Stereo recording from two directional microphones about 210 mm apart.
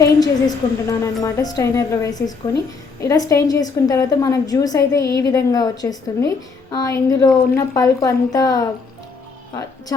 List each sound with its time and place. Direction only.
0.0 s a woman's voice: 15° left (ahead or behind)